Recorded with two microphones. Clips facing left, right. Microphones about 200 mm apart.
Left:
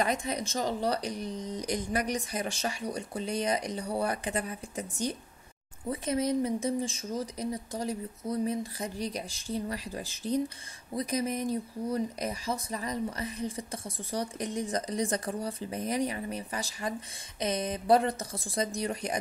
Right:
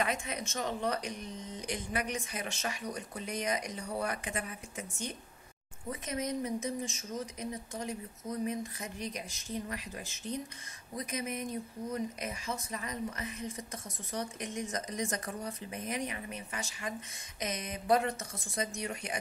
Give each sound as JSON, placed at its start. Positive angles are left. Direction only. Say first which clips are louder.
{"t": 0.0, "sound": "speech", "louder": "left 4 dB", "side_deg": 35}